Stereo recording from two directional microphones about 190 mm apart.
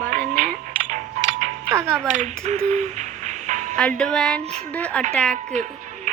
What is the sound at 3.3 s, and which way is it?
Music, 40° right (ahead or behind).